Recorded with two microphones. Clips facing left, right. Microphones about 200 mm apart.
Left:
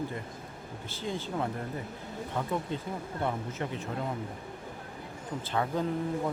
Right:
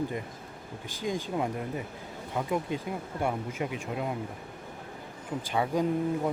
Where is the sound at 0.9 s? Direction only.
15° right (ahead or behind).